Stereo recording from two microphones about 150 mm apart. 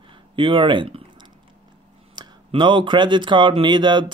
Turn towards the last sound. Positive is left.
turn(degrees=-30)  # may be behind; listen again after turning